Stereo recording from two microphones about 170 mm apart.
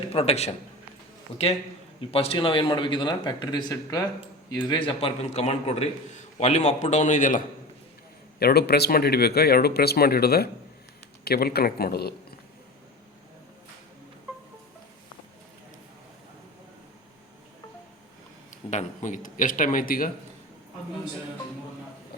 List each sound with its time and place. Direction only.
0.1 s a man's voice: 35° left (ahead or behind)
2.0 s a man's voice: 35° left (ahead or behind)
8.4 s a man's voice: 65° left (ahead or behind)
18.7 s a man's voice: 45° left (ahead or behind)